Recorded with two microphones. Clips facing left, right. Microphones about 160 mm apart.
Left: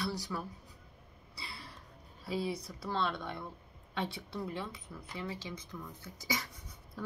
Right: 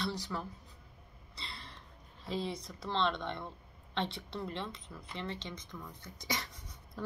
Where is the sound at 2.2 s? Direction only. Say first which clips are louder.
Left 2 dB; 5° left (ahead or behind).